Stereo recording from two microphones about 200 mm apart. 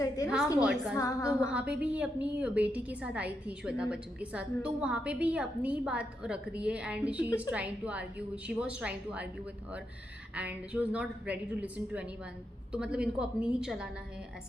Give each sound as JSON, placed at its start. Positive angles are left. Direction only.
{"t": 0.5, "sound": "a woman's voice", "side_deg": -5}
{"t": 0.9, "sound": "a woman's voice", "side_deg": 15}
{"t": 1.5, "sound": "a woman's voice", "side_deg": -5}
{"t": 10.3, "sound": "a woman's voice", "side_deg": -5}